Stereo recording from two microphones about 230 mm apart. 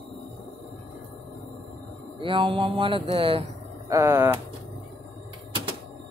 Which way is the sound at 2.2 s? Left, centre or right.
Right.